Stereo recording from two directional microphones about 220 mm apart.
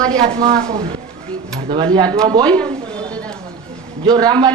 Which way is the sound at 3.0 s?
5° left (ahead or behind).